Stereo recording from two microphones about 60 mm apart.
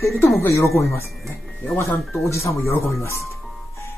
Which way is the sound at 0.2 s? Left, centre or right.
Left.